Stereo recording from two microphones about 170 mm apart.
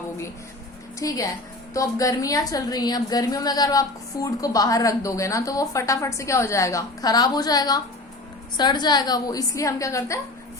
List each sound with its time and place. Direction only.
0.9 s a woman's voice: 20° left (ahead or behind)